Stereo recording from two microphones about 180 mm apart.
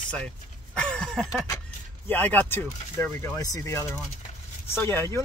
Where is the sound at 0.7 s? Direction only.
5° left (ahead or behind).